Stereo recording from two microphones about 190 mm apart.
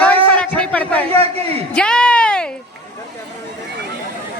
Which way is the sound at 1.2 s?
30° right (ahead or behind).